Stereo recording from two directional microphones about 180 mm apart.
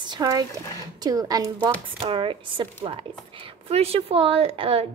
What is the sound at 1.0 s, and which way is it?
A woman's voice, 20° right (ahead or behind).